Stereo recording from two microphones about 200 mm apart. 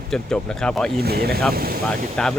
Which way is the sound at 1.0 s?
50° right (ahead or behind).